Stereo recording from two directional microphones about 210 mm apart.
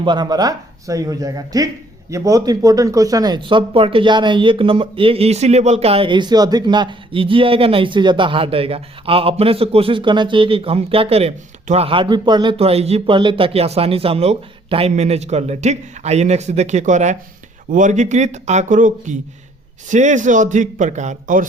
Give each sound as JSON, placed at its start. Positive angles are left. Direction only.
{"t": 0.0, "sound": "speech", "side_deg": -20}